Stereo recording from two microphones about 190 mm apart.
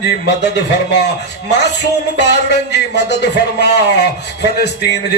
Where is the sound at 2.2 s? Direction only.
65° left (ahead or behind).